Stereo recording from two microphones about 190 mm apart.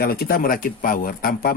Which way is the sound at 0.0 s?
50° left (ahead or behind).